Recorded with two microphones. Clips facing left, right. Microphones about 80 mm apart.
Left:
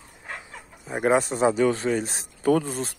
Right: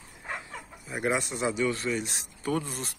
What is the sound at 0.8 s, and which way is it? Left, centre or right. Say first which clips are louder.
Speech: left 8 dB; left.